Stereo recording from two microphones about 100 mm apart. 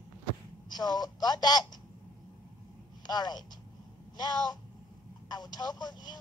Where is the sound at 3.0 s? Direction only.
45° left (ahead or behind).